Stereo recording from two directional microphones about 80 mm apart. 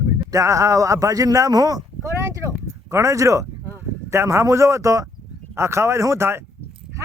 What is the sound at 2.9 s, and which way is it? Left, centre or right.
Speech, right.